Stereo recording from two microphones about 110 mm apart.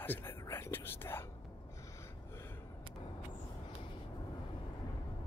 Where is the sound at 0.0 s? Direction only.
20° left (ahead or behind).